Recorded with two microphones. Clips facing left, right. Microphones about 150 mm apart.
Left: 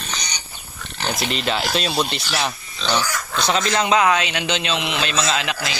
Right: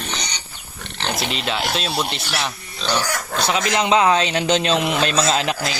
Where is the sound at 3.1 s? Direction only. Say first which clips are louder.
Right 1 dB; 45° right (ahead or behind).